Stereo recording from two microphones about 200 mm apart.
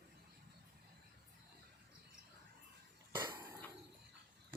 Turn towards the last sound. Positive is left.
turn(degrees=-15)  # may be behind; listen again after turning